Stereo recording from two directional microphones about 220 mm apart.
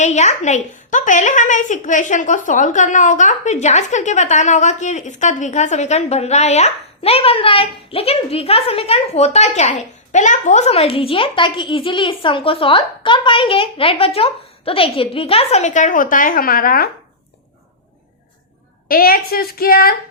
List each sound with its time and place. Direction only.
0.0 s a woman's voice: 30° left (ahead or behind)
18.9 s a woman's voice: 40° left (ahead or behind)